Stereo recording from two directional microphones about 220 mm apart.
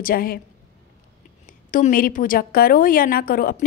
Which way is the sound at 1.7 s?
40° left (ahead or behind).